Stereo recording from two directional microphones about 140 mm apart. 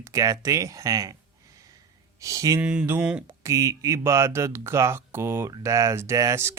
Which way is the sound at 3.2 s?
20° right (ahead or behind).